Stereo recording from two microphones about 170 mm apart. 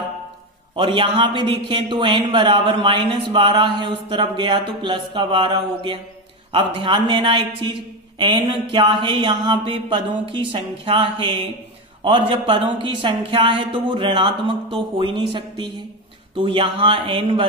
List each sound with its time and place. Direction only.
0.7 s speech: 30° right (ahead or behind)
8.7 s speech: 30° right (ahead or behind)